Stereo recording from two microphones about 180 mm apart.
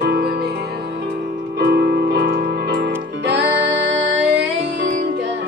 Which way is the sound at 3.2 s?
80° right.